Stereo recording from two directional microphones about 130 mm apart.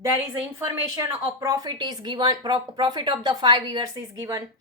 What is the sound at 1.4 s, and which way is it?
Speech, 25° right (ahead or behind).